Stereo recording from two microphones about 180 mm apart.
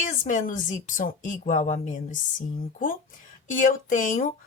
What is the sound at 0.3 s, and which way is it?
A woman's voice, 45° left (ahead or behind).